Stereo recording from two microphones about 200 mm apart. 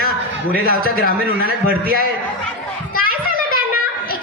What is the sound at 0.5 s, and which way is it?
A man's voice, 50° left (ahead or behind).